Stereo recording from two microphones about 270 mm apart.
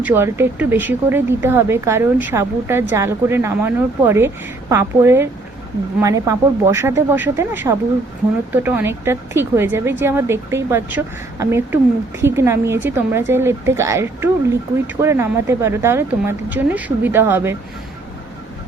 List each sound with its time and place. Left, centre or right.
0.0 s speech: centre